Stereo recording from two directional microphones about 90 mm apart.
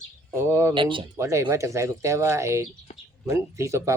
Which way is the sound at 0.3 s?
30° right (ahead or behind).